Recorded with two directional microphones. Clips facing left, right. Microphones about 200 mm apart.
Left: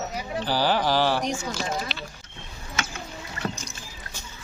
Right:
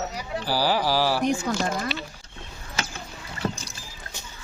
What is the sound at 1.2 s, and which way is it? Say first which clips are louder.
Speech: right 5 dB; 60° right (ahead or behind).